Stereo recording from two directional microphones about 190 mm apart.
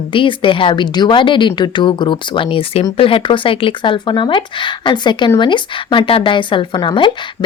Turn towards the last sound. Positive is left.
turn(degrees=25)  # may be behind; listen again after turning